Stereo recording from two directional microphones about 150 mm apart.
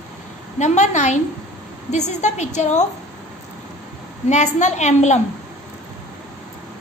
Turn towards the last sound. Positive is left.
turn(degrees=50)  # may be behind; listen again after turning